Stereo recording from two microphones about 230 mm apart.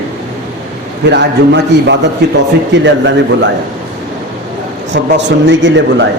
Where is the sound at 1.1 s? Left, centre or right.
Right.